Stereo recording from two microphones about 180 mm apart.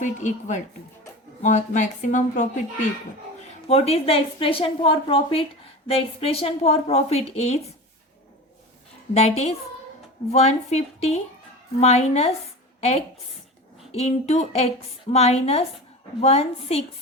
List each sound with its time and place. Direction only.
0.0 s a woman's voice: 40° left (ahead or behind)
9.1 s a woman's voice: 35° left (ahead or behind)
13.9 s a woman's voice: 35° left (ahead or behind)